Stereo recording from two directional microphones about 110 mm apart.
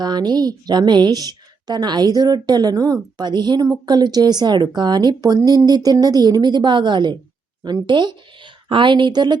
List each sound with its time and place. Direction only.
0.0 s a woman's voice: 40° right (ahead or behind)